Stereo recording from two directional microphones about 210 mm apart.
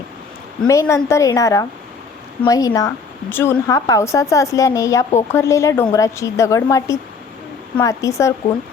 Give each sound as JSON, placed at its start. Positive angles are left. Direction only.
{"t": 0.7, "sound": "speech", "side_deg": 15}